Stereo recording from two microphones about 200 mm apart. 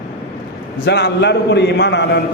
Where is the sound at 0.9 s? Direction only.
60° left (ahead or behind).